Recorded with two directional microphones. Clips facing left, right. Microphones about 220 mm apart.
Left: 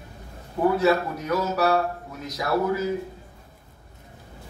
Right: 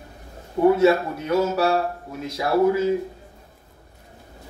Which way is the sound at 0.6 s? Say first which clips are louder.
Right 4 dB; 25° right (ahead or behind).